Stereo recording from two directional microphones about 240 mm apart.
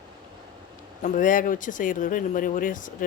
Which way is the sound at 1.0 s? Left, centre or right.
Left.